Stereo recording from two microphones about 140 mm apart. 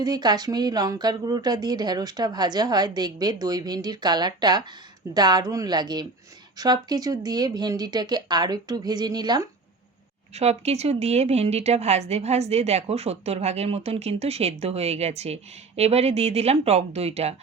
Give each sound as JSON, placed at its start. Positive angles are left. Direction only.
{"t": 0.0, "sound": "speech", "side_deg": -30}
{"t": 10.3, "sound": "a woman's voice", "side_deg": -50}